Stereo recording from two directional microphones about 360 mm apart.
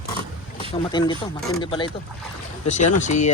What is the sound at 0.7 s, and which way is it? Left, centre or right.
Speech, centre.